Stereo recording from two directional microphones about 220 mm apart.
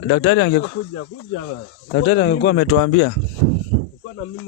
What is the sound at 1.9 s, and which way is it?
Speech, 55° left (ahead or behind).